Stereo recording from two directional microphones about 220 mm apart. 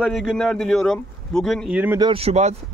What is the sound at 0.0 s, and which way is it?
Speech, centre (ahead or behind).